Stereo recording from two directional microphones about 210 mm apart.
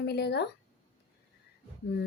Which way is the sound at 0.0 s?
50° left (ahead or behind).